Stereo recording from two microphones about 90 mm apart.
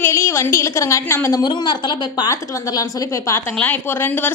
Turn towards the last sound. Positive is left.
turn(degrees=20)  # may be behind; listen again after turning